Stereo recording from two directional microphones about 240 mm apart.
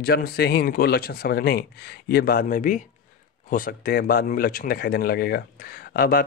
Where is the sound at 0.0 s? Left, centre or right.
Left.